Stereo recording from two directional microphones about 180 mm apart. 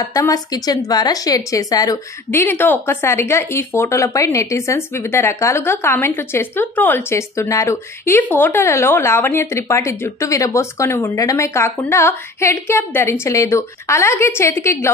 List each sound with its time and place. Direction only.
0.1 s a woman's voice: 20° left (ahead or behind)